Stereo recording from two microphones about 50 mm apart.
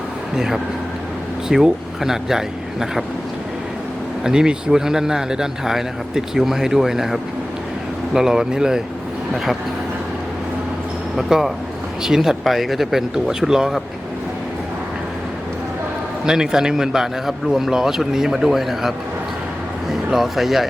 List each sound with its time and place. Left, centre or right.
0.3 s speech: centre
4.2 s speech: centre
11.2 s speech: centre
16.2 s speech: centre